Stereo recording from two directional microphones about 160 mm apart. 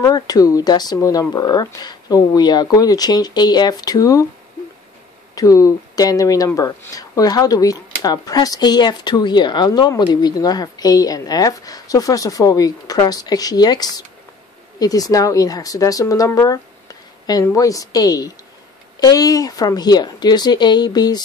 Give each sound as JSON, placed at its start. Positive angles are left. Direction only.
{"t": 0.0, "sound": "speech", "side_deg": 20}
{"t": 5.3, "sound": "speech", "side_deg": 20}